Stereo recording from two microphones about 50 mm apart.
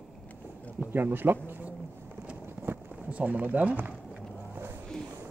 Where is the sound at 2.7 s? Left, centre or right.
Right.